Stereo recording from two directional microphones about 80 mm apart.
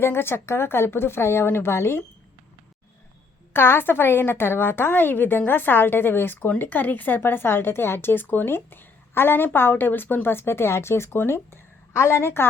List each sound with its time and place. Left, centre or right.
0.0 s a woman's voice: left
3.5 s a woman's voice: left